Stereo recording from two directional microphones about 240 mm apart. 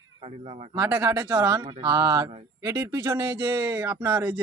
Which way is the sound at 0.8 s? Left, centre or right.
Centre.